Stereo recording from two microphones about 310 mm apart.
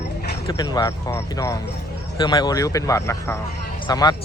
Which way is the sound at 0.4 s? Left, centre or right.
Centre.